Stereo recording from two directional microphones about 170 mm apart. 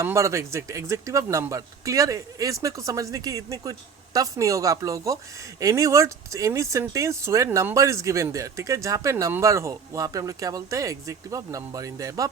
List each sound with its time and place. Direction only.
0.0 s speech: 15° right (ahead or behind)